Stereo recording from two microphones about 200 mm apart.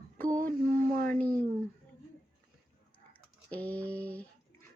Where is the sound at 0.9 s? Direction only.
45° right (ahead or behind).